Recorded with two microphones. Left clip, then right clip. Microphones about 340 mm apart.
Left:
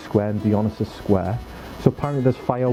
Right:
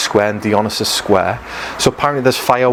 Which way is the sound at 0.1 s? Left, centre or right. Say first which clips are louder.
Right 4 dB; centre.